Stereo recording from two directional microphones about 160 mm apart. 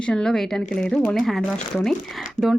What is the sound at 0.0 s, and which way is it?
Speech, 5° left (ahead or behind).